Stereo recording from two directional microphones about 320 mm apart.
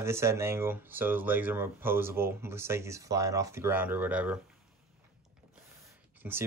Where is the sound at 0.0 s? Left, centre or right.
Centre.